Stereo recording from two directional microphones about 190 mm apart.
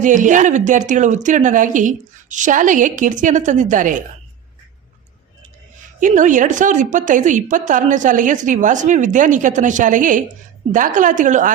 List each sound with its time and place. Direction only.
0.0 s a woman's voice: 40° right (ahead or behind)
6.0 s a woman's voice: 40° right (ahead or behind)